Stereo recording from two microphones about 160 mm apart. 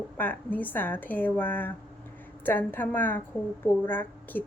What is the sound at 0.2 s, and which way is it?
Speech, 10° left (ahead or behind).